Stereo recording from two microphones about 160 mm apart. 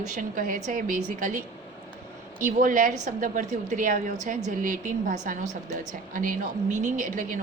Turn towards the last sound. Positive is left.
turn(degrees=-60)  # may be behind; listen again after turning